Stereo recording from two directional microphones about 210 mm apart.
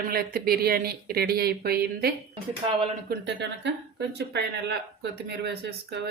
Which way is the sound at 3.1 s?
55° right (ahead or behind).